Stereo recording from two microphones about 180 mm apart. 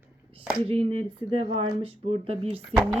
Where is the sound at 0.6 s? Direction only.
30° right (ahead or behind).